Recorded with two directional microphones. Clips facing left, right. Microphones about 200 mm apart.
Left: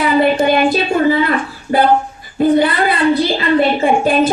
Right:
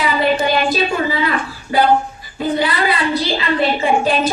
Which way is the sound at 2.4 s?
50° left (ahead or behind).